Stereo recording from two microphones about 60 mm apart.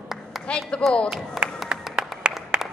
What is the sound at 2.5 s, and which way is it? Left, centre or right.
Applause, centre.